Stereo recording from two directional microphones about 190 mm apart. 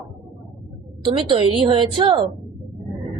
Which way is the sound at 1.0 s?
25° right (ahead or behind).